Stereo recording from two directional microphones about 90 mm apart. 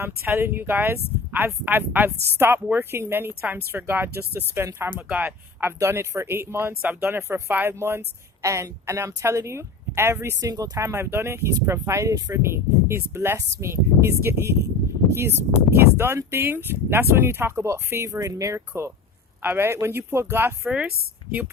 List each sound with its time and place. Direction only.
0.0 s speech: 25° right (ahead or behind)
5.8 s speech: 35° right (ahead or behind)
15.7 s speech: 25° right (ahead or behind)
20.7 s speech: 15° right (ahead or behind)